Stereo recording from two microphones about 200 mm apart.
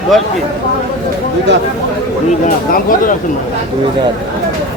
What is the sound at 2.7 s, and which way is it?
Speech, 45° left (ahead or behind).